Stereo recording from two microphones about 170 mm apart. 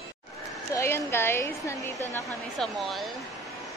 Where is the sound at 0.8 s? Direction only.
15° left (ahead or behind).